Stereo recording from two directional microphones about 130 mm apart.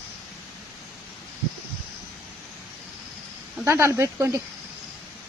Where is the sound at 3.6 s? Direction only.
20° right (ahead or behind).